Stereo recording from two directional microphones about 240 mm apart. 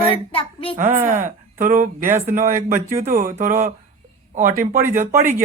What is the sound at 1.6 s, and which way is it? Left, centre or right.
Speech, right.